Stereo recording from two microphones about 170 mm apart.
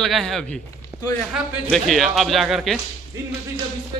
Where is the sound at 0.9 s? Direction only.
15° right (ahead or behind).